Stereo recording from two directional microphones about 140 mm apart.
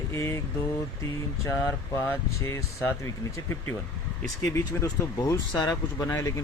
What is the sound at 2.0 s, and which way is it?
Speech, 20° left (ahead or behind).